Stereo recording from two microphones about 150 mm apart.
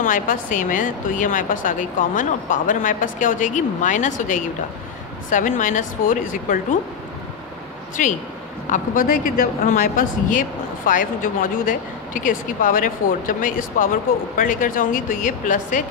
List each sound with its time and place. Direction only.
0.0 s a woman's voice: 60° left (ahead or behind)
8.0 s a woman's voice: 60° left (ahead or behind)